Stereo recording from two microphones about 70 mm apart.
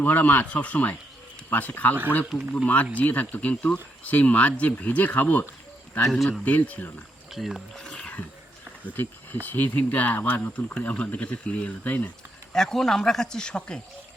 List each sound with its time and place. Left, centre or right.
0.0 s speech: left
2.3 s speech: centre
3.0 s speech: left
6.1 s speech: centre
6.4 s speech: left
7.3 s speech: centre
7.9 s roaring cats: centre
8.9 s speech: left
10.8 s speech: centre
11.9 s speech: left
12.5 s speech: centre